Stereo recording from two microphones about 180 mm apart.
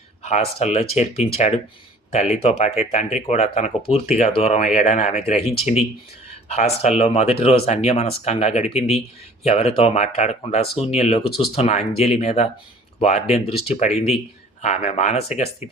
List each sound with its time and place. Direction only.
0.2 s speech: 40° left (ahead or behind)